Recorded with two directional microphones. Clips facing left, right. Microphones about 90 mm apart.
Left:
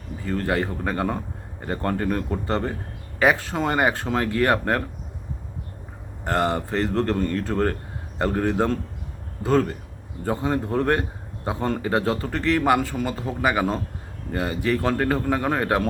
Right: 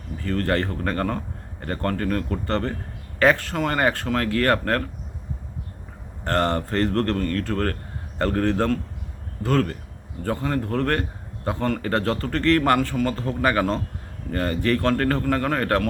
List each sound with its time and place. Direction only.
0.2 s a man's voice: 15° left (ahead or behind)
6.2 s a man's voice: 10° left (ahead or behind)